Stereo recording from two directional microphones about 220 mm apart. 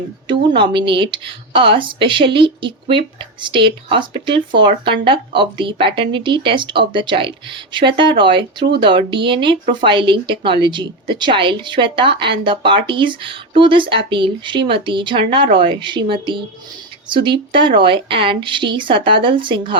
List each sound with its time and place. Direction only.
0.6 s a woman's voice: 20° right (ahead or behind)